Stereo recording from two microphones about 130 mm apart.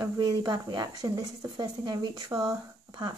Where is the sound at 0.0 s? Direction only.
30° right (ahead or behind).